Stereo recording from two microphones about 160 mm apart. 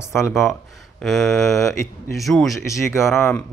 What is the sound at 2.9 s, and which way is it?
Speech, 15° left (ahead or behind).